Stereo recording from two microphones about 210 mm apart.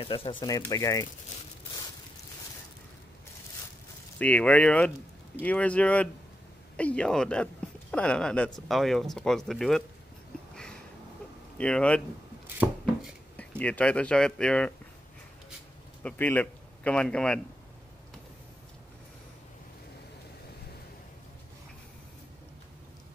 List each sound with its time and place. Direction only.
0.0 s speech: 25° left (ahead or behind)
4.2 s speech: 5° left (ahead or behind)
11.5 s speech: 5° left (ahead or behind)
13.6 s speech: 5° left (ahead or behind)
16.0 s a man's voice: 5° left (ahead or behind)